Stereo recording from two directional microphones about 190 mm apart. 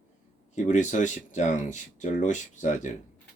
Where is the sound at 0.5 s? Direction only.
40° left (ahead or behind).